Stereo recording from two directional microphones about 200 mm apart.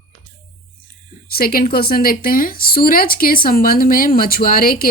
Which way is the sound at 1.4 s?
45° left (ahead or behind).